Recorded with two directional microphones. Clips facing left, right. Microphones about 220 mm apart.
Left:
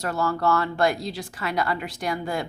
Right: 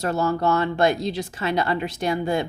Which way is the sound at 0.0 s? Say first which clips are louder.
Right 3 dB; 25° right (ahead or behind).